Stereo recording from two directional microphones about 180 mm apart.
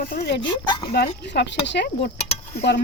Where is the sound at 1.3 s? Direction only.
75° left (ahead or behind).